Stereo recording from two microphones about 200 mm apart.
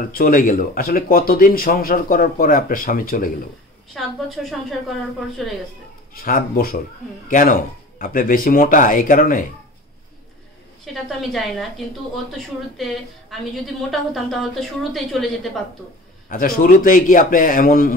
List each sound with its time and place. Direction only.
0.1 s speech: 45° left (ahead or behind)
3.9 s a woman's voice: centre (ahead or behind)
6.1 s speech: 45° left (ahead or behind)
10.9 s a woman's voice: centre (ahead or behind)
16.3 s speech: 45° left (ahead or behind)